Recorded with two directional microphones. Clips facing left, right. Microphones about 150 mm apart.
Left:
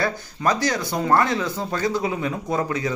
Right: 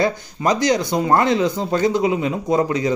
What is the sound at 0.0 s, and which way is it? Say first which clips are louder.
Speech: right 4 dB; 20° right (ahead or behind).